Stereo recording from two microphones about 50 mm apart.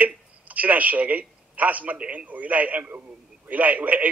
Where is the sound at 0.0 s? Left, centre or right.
Right.